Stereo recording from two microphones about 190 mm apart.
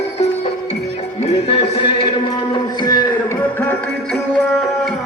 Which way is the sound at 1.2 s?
35° left (ahead or behind).